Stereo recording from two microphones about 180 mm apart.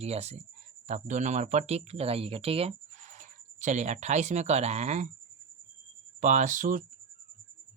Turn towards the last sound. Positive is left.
turn(degrees=-45)  # may be behind; listen again after turning